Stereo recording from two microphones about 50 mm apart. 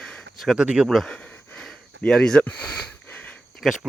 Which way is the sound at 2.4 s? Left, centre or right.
Left.